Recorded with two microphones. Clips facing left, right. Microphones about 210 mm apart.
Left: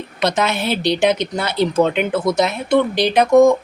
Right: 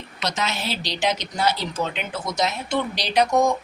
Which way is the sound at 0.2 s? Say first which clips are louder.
Left 8 dB; 55° left (ahead or behind).